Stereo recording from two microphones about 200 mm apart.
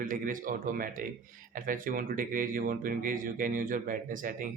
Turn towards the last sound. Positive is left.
turn(degrees=-40)  # may be behind; listen again after turning